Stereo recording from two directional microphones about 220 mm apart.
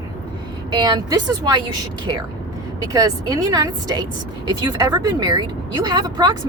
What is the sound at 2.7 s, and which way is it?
A woman's voice, 15° right (ahead or behind).